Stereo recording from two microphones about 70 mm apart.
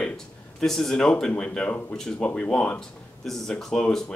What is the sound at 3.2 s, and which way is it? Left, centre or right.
Speech, centre.